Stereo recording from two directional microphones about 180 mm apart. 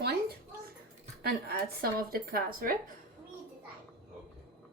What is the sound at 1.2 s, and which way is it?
A woman's voice, 60° right (ahead or behind).